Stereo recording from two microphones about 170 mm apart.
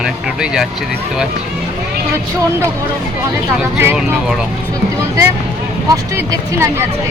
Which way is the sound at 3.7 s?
10° right (ahead or behind).